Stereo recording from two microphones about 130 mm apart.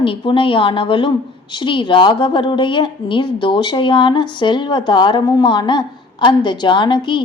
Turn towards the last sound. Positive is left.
turn(degrees=40)  # may be behind; listen again after turning